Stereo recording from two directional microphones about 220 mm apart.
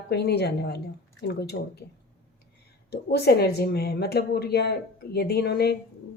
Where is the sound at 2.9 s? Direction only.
45° left (ahead or behind).